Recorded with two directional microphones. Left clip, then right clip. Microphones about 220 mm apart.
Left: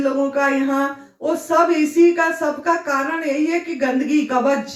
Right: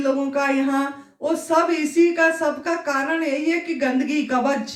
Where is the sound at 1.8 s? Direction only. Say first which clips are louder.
Left 2 dB; 45° right (ahead or behind).